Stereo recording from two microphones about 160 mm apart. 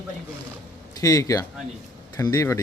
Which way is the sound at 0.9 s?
20° left (ahead or behind).